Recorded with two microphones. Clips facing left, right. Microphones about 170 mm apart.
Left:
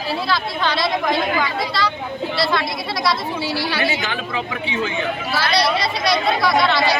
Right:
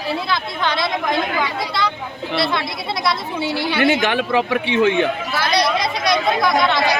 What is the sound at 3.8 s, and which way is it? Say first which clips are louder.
Speech: right 6 dB; 60° right (ahead or behind).